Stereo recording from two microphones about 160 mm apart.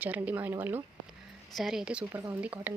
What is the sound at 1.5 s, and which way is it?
Speech, centre (ahead or behind).